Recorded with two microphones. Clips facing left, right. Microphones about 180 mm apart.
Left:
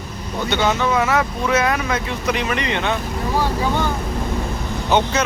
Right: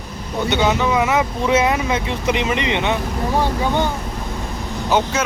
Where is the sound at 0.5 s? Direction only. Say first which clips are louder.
Right 1 dB; 15° right (ahead or behind).